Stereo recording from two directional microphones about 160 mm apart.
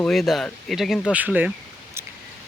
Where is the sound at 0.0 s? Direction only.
Centre (ahead or behind).